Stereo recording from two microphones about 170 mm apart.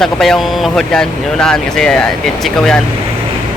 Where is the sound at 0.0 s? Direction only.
Centre (ahead or behind).